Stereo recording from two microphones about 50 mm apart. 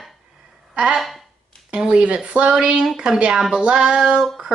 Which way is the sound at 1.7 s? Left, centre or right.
Right.